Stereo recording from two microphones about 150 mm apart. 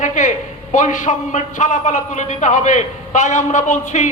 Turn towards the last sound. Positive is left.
turn(degrees=55)  # may be behind; listen again after turning